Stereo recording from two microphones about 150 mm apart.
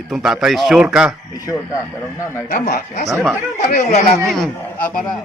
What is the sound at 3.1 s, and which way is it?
A man's voice, 5° right (ahead or behind).